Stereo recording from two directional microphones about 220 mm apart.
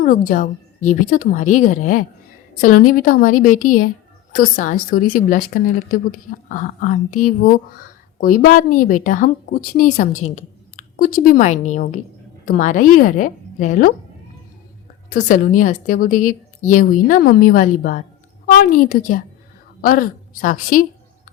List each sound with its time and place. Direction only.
0.0 s a woman's voice: 40° left (ahead or behind)
10.1 s a woman's voice: 75° left (ahead or behind)
10.3 s a woman's voice: 40° left (ahead or behind)
15.1 s a woman's voice: 40° left (ahead or behind)